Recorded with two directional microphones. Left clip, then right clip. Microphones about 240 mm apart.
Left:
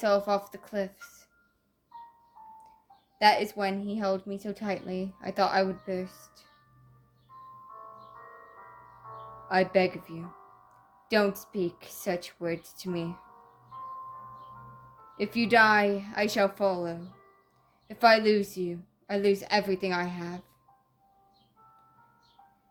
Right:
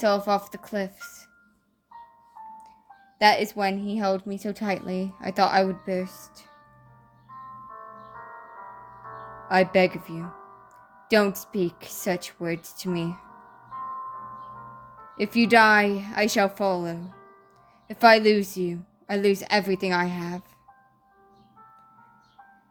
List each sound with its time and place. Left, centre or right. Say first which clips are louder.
0.0 s a woman's voice: right 3 dB; right
3.2 s a woman's voice: right 3 dB; right
9.0 s a woman's voice: right 5 dB; right
15.1 s a woman's voice: right 5 dB; right